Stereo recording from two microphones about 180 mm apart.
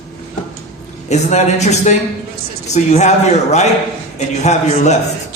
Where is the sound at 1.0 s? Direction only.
40° left (ahead or behind).